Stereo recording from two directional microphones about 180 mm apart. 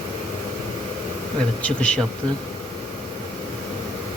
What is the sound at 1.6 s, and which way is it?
Speech, 5° left (ahead or behind).